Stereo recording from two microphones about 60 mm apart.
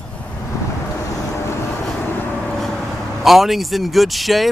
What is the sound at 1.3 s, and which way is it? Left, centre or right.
Vehicle, left.